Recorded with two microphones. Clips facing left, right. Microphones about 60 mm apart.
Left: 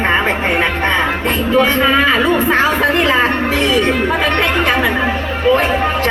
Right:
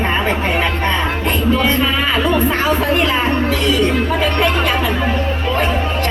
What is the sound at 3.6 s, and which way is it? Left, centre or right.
Speech, left.